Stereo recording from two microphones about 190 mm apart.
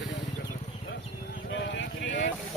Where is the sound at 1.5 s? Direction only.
70° left (ahead or behind).